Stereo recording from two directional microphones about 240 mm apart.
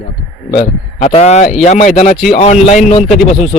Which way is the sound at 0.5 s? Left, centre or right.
Left.